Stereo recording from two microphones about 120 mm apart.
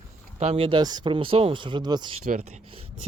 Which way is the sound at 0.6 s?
40° right (ahead or behind).